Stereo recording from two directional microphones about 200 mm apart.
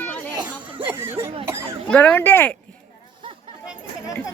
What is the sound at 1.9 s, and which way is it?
Speech, 10° left (ahead or behind).